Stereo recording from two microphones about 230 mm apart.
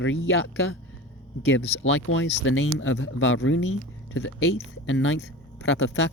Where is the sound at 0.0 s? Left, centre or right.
Left.